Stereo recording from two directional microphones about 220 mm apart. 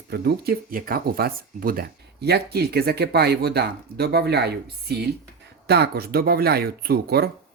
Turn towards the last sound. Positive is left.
turn(degrees=-45)  # may be behind; listen again after turning